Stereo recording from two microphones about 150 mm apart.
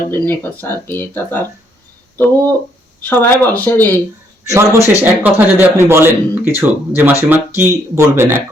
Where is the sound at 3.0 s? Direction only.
15° left (ahead or behind).